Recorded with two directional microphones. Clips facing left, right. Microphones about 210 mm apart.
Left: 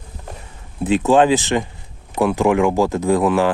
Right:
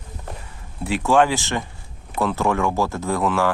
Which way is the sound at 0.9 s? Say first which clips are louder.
Left 4 dB; 20° left (ahead or behind).